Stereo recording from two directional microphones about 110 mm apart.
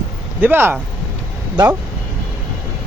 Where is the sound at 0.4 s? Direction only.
20° right (ahead or behind).